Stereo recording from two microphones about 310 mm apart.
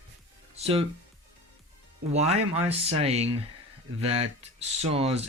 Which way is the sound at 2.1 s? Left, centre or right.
Right.